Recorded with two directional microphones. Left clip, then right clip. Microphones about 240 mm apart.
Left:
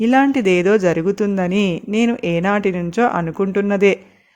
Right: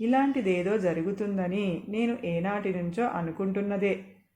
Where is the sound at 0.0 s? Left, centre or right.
Left.